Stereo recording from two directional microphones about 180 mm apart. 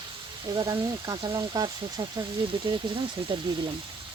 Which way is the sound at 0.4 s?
25° right (ahead or behind).